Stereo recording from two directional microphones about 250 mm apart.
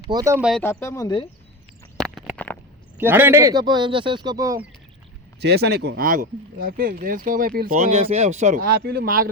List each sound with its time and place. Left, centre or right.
0.1 s speech: centre
0.5 s speech: centre
2.0 s a sound: centre
3.0 s speech: centre
5.4 s speech: right